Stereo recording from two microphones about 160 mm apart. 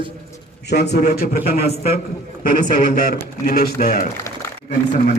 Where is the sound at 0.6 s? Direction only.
90° left; by 1.4 s 75° left (ahead or behind).